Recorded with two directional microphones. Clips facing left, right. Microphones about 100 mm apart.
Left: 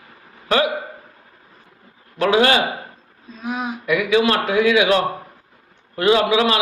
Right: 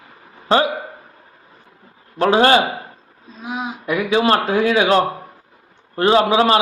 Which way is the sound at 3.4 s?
20° right (ahead or behind).